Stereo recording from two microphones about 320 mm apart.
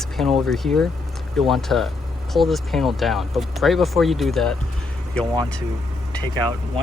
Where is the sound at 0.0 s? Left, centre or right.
Centre.